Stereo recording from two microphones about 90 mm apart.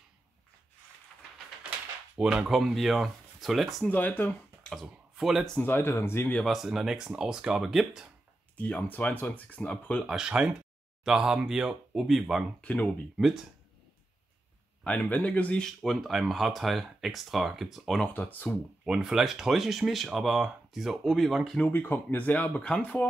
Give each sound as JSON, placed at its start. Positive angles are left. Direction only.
{"t": 2.1, "sound": "speech", "side_deg": -10}
{"t": 3.8, "sound": "speech", "side_deg": 20}
{"t": 4.8, "sound": "speech", "side_deg": -5}
{"t": 5.6, "sound": "speech", "side_deg": 25}
{"t": 6.4, "sound": "speech", "side_deg": 0}
{"t": 8.5, "sound": "speech", "side_deg": 15}
{"t": 10.0, "sound": "speech", "side_deg": -5}
{"t": 12.6, "sound": "speech", "side_deg": 15}
{"t": 13.2, "sound": "speech", "side_deg": -5}
{"t": 14.8, "sound": "speech", "side_deg": 15}
{"t": 15.6, "sound": "speech", "side_deg": 0}
{"t": 18.0, "sound": "speech", "side_deg": 20}
{"t": 18.9, "sound": "speech", "side_deg": -5}
{"t": 21.5, "sound": "speech", "side_deg": 20}